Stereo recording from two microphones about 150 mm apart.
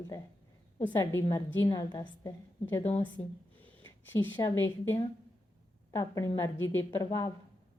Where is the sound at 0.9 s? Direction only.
20° left (ahead or behind).